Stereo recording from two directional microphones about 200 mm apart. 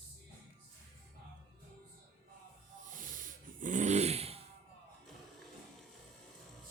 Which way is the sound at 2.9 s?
40° right (ahead or behind).